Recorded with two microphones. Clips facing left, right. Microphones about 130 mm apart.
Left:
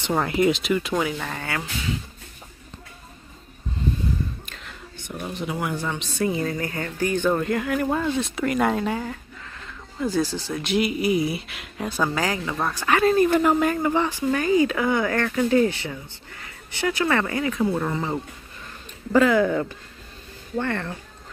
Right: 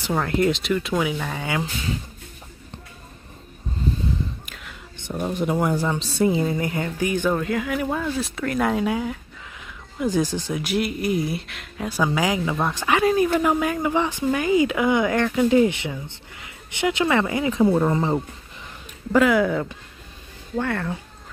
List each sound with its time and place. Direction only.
0.1 s speech: 5° left (ahead or behind); by 1.6 s 10° right (ahead or behind)
5.1 s speech: 50° right (ahead or behind)
6.1 s speech: 25° right (ahead or behind)
7.3 s speech: centre (ahead or behind)
9.9 s speech: 15° right (ahead or behind); by 11.9 s 5° left (ahead or behind)
12.0 s speech: 10° right (ahead or behind)
19.1 s speech: 10° right (ahead or behind)